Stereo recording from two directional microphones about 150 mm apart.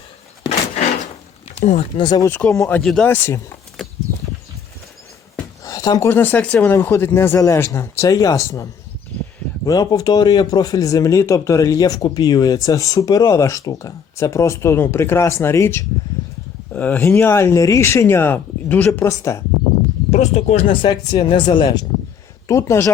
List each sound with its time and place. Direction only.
1.5 s speech: 50° left (ahead or behind)
2.0 s speech: 25° left (ahead or behind)
2.3 s speech: 15° left (ahead or behind)
2.8 s speech: 5° left (ahead or behind)
3.1 s speech: 15° left (ahead or behind)
3.8 s a sound: centre (ahead or behind)
5.6 s speech: 25° left (ahead or behind)
9.6 s speech: 25° left (ahead or behind)
20.1 s speech: 45° left (ahead or behind)
20.8 s speech: 25° left (ahead or behind)
22.4 s speech: 20° left (ahead or behind)